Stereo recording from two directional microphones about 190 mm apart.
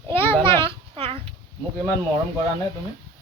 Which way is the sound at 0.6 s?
30° right (ahead or behind).